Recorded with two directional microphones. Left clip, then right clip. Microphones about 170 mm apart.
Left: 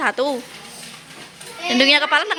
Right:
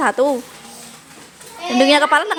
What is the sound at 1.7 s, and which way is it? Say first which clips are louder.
Speech: right 2 dB; 20° right (ahead or behind).